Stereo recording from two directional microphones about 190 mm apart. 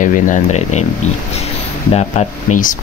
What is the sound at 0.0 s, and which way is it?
Speech, 40° left (ahead or behind).